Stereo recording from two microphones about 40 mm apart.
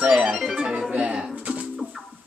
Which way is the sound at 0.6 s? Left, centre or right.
Right.